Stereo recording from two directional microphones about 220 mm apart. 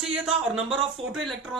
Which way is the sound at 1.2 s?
Centre (ahead or behind).